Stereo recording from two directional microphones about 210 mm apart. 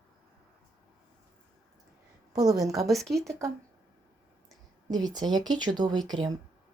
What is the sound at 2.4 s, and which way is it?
Speech, 15° right (ahead or behind).